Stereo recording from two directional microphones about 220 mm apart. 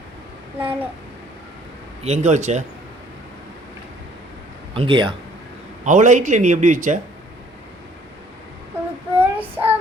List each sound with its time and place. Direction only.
0.6 s a child's voice: 5° right (ahead or behind)
2.0 s a man's voice: 30° right (ahead or behind)
4.7 s speech: 25° right (ahead or behind)
5.8 s a man's voice: 35° right (ahead or behind)
9.1 s child singing: 10° right (ahead or behind)